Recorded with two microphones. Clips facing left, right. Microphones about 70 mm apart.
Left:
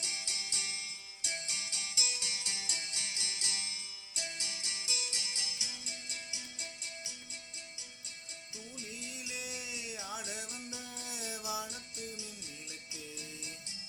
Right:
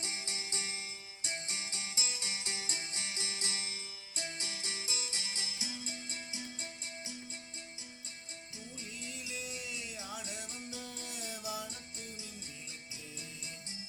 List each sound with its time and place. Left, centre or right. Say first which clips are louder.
0.0 s music: right 1 dB; right
9.0 s music: right 2 dB; centre
11.9 s music: left 3 dB; right